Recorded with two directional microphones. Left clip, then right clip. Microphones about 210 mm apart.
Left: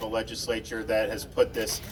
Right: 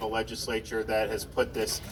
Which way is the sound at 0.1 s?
35° left (ahead or behind).